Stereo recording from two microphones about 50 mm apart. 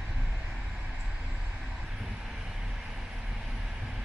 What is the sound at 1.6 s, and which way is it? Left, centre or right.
Vehicle, centre.